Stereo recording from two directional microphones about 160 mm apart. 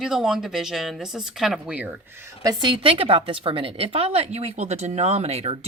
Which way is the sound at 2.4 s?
30° right (ahead or behind).